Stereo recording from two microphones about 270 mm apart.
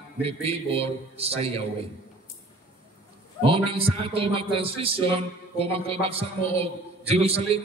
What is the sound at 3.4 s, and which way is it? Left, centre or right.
A man's voice, centre.